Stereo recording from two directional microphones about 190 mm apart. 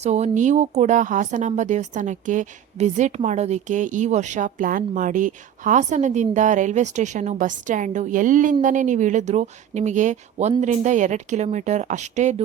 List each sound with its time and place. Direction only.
0.0 s speech: 35° right (ahead or behind)